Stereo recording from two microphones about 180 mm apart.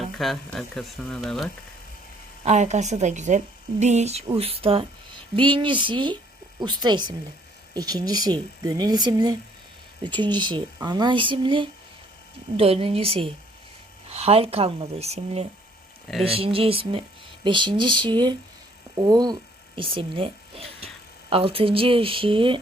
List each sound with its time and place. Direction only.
0.2 s speech: centre (ahead or behind)
2.4 s a woman's voice: 40° right (ahead or behind)